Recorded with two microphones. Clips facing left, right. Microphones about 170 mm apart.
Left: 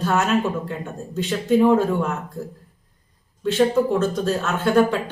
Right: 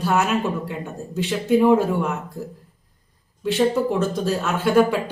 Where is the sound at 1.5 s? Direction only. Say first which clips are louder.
Even; 10° right (ahead or behind).